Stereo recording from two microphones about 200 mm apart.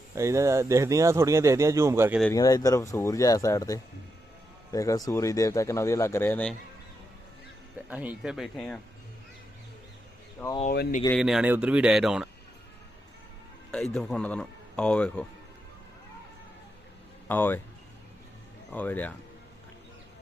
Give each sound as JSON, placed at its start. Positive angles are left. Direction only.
{"t": 0.2, "sound": "speech", "side_deg": -15}
{"t": 2.3, "sound": "speech", "side_deg": 15}
{"t": 7.9, "sound": "a man's voice", "side_deg": -5}
{"t": 10.6, "sound": "speech", "side_deg": 40}
{"t": 11.2, "sound": "a man's voice", "side_deg": -5}
{"t": 13.7, "sound": "a man's voice", "side_deg": 0}
{"t": 17.2, "sound": "speech", "side_deg": 10}
{"t": 18.7, "sound": "speech", "side_deg": 10}